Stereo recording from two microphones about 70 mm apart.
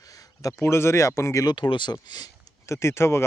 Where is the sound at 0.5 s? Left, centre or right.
Left.